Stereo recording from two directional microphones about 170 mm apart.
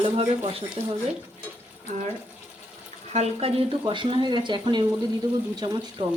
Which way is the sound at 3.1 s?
40° right (ahead or behind).